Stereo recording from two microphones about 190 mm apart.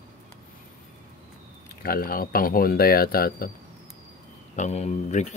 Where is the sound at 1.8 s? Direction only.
50° left (ahead or behind).